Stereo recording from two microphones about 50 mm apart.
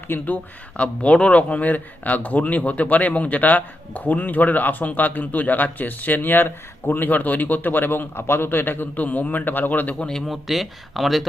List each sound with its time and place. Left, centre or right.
0.1 s speech: left
0.8 s speech: left
10.0 s speech: centre
10.2 s speech: centre